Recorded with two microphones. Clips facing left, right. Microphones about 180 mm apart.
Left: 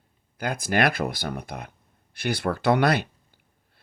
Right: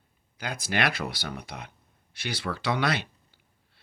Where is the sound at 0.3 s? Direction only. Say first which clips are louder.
Left 6 dB; 55° left (ahead or behind).